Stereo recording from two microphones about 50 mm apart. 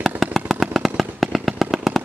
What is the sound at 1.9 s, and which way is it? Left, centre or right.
Vehicle, centre.